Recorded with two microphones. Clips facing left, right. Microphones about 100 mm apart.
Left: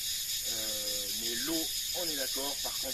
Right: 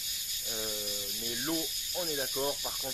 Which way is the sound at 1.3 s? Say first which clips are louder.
Right 2 dB; 50° right (ahead or behind).